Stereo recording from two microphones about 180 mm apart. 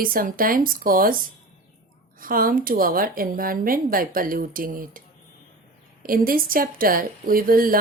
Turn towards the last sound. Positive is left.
turn(degrees=-50)  # may be behind; listen again after turning